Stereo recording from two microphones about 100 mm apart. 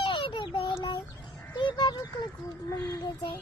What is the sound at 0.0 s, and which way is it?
Child singing, 60° left (ahead or behind).